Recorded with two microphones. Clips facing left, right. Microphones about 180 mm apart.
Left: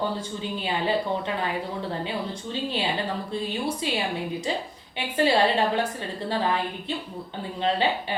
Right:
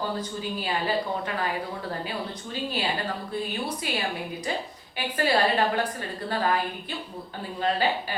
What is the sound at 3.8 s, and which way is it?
A woman's voice, 25° left (ahead or behind).